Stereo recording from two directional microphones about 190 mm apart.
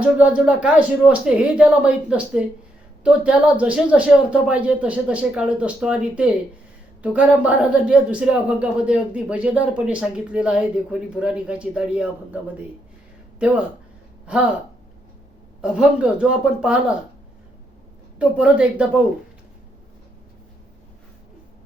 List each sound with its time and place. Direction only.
0.0 s speech: 5° right (ahead or behind)
14.3 s speech: 5° right (ahead or behind)
15.6 s speech: 5° right (ahead or behind)
18.2 s speech: 5° right (ahead or behind)